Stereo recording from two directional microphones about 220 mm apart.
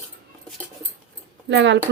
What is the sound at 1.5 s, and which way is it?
Speech, 55° right (ahead or behind).